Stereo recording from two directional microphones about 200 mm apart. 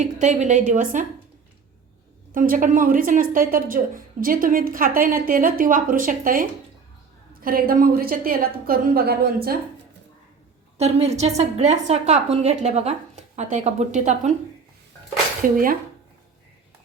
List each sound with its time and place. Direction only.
0.0 s a woman's voice: 35° right (ahead or behind)
2.3 s a woman's voice: 45° right (ahead or behind)
10.8 s a woman's voice: 30° right (ahead or behind)
15.4 s a woman's voice: 45° right (ahead or behind)